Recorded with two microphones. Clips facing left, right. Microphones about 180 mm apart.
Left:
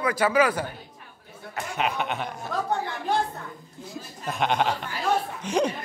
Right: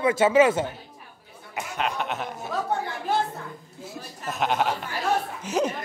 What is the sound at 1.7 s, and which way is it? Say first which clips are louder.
Speech: left 1 dB; centre (ahead or behind).